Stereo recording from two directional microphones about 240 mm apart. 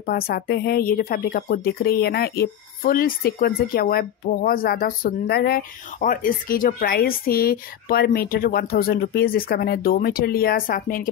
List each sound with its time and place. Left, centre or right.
0.0 s speech: left